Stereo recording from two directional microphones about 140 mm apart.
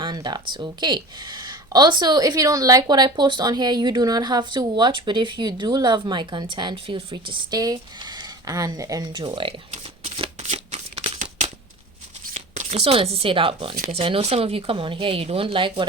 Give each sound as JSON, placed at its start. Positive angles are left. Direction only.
{"t": 0.0, "sound": "speech", "side_deg": -30}
{"t": 9.7, "sound": "shuffling cards", "side_deg": -45}
{"t": 12.3, "sound": "speech", "side_deg": -50}